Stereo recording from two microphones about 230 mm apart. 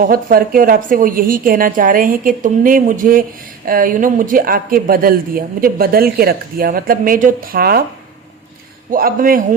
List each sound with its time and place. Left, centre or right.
0.1 s a man's voice: right
8.9 s a man's voice: right